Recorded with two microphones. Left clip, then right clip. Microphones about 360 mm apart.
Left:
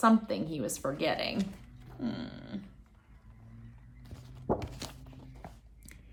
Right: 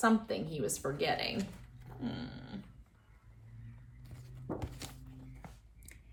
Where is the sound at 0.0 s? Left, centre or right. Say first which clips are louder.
Left 4 dB; centre.